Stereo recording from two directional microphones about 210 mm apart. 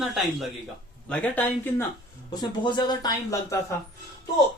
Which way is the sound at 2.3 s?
20° left (ahead or behind).